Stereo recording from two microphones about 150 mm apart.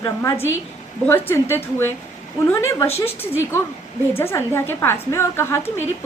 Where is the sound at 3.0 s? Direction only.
15° left (ahead or behind).